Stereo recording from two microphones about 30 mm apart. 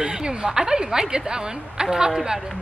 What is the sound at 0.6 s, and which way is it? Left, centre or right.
A woman's voice, centre.